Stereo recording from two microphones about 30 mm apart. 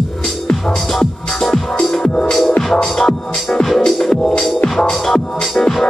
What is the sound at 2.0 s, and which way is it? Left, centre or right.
Music, left.